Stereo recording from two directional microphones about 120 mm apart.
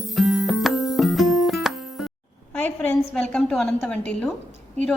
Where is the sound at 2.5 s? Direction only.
15° left (ahead or behind).